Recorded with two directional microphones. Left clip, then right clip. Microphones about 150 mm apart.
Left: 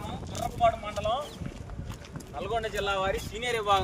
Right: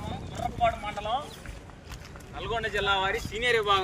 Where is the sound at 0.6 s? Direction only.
75° left (ahead or behind).